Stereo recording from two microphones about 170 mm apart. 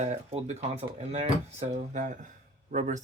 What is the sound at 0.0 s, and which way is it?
Speech, 40° right (ahead or behind).